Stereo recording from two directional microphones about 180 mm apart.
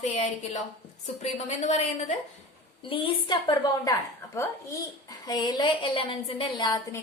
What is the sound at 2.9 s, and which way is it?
Speech, 25° left (ahead or behind).